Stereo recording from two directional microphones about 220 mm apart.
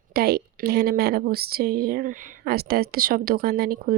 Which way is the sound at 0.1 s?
45° right (ahead or behind).